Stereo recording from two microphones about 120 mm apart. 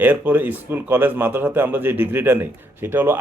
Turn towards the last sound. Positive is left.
turn(degrees=-20)  # may be behind; listen again after turning